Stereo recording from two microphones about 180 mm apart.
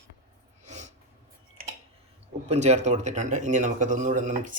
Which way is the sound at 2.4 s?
40° right (ahead or behind).